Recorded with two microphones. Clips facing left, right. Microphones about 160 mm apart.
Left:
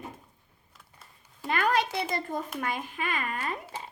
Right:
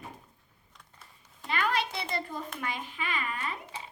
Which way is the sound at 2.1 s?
45° left (ahead or behind).